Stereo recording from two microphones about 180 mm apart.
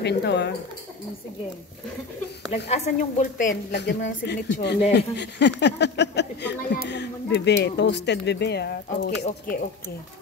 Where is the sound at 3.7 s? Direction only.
70° left (ahead or behind).